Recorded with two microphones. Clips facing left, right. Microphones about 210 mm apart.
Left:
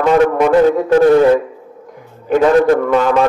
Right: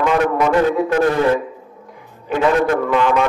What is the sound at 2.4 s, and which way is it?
Music, 40° left (ahead or behind).